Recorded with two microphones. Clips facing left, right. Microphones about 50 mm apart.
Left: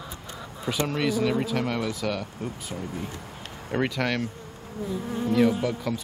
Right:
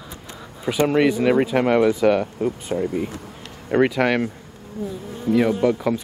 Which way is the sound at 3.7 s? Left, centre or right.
Centre.